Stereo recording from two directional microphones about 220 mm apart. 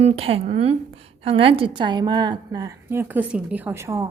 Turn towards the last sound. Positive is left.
turn(degrees=-10)  # may be behind; listen again after turning